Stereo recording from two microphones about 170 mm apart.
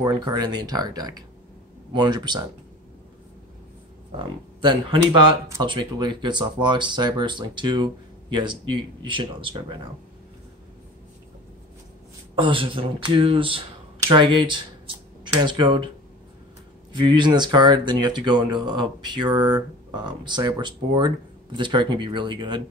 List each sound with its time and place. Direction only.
0.0 s speech: 25° right (ahead or behind)
4.2 s speech: 30° right (ahead or behind)
9.0 s speech: 30° right (ahead or behind)
12.4 s speech: 30° right (ahead or behind)
16.9 s speech: 25° right (ahead or behind)